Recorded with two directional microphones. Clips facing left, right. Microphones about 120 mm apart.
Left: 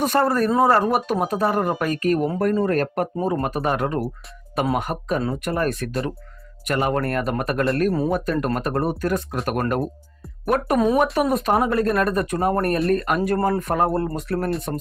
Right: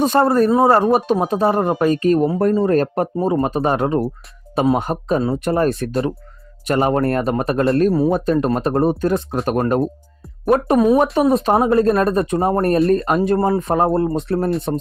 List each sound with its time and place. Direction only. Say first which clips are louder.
0.0 s speech: right 5 dB; 25° right (ahead or behind)
13.3 s speech: right 4 dB; 20° right (ahead or behind)